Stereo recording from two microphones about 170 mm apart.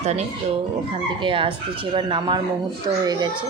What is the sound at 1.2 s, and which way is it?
Speech, 30° right (ahead or behind).